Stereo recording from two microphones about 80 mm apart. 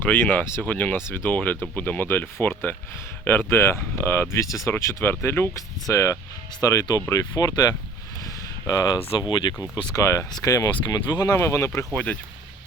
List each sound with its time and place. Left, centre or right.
0.1 s speech: left
0.9 s speech: left
8.2 s a sound: left
9.3 s speech: left
9.9 s speech: left
11.3 s speech: left